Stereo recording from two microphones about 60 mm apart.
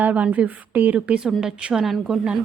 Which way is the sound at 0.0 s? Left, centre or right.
Right.